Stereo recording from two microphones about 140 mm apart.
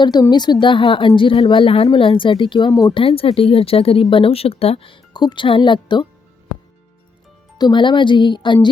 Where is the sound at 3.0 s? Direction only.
40° left (ahead or behind).